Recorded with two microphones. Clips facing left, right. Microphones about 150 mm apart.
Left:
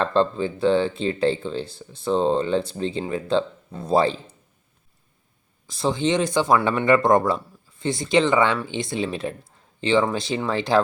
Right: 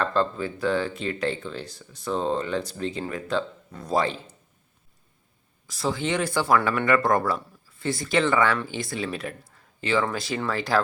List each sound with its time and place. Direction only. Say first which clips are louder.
0.0 s speech: left 4 dB; 25° left (ahead or behind)
5.6 s speech: left 5 dB; 25° left (ahead or behind)